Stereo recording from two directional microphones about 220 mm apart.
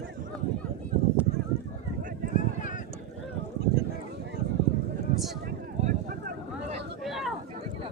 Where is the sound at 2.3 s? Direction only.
35° left (ahead or behind).